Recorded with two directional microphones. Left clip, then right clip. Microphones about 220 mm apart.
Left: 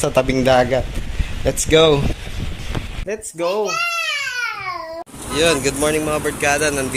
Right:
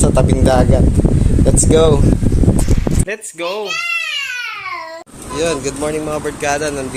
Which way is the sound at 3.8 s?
15° left (ahead or behind).